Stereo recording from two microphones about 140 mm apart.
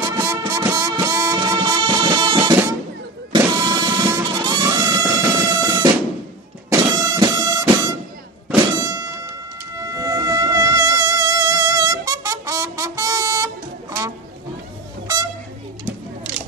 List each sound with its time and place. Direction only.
0.0 s music: 25° right (ahead or behind)
8.7 s thunk: 25° right (ahead or behind)
9.8 s music: 25° right (ahead or behind)